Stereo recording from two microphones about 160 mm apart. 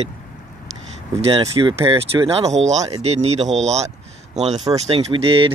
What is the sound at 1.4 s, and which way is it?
Speech, 25° right (ahead or behind).